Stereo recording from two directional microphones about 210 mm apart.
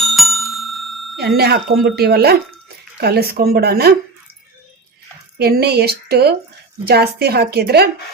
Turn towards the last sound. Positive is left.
turn(degrees=-50)  # may be behind; listen again after turning